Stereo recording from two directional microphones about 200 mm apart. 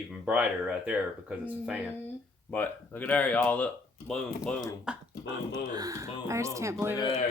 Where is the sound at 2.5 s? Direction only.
10° left (ahead or behind).